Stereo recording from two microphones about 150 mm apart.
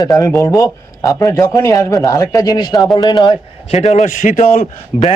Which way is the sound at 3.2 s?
45° left (ahead or behind).